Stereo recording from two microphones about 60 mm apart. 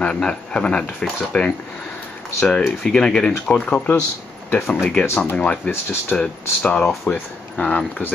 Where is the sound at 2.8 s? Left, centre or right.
Centre.